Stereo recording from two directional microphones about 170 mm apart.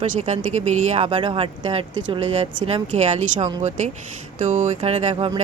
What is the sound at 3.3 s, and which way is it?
Speech, 45° right (ahead or behind).